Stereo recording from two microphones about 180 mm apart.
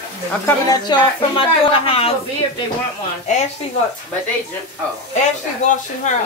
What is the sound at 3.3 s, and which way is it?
Speech, 40° left (ahead or behind).